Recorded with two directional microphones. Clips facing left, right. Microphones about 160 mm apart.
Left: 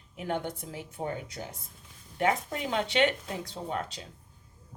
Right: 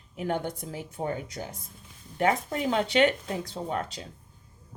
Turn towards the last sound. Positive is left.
turn(degrees=-35)  # may be behind; listen again after turning